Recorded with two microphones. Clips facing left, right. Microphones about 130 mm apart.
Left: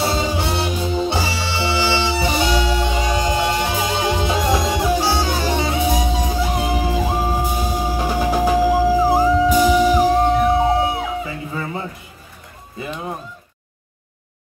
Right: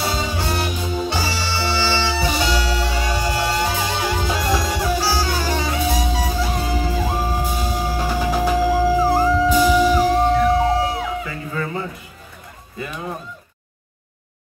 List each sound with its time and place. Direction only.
0.0 s music: 25° left (ahead or behind)